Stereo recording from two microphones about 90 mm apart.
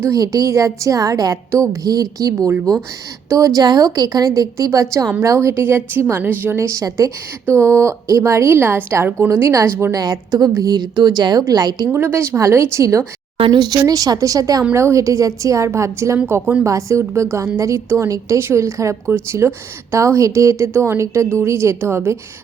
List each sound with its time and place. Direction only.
0.1 s a woman's voice: 40° right (ahead or behind)
10.0 s a woman's voice: 45° right (ahead or behind)
11.9 s a woman's voice: 25° right (ahead or behind)
13.4 s a woman's voice: 55° right (ahead or behind)
14.7 s a woman's voice: 30° right (ahead or behind)
16.6 s a woman's voice: 35° right (ahead or behind)